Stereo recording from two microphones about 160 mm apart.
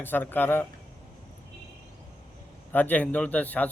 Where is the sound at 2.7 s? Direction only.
10° left (ahead or behind).